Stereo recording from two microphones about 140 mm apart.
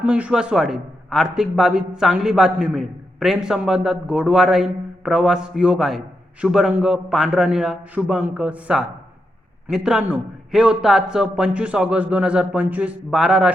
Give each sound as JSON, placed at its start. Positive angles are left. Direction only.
{"t": 0.0, "sound": "a man's voice", "side_deg": -10}